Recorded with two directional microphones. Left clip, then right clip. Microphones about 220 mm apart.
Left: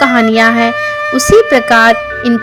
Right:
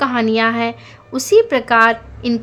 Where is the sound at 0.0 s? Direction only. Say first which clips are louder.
Left 7 dB; 20° left (ahead or behind).